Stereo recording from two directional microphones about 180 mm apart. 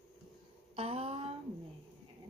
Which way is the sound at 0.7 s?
35° right (ahead or behind).